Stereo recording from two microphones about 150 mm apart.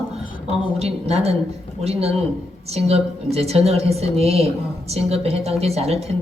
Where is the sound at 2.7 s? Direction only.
45° right (ahead or behind).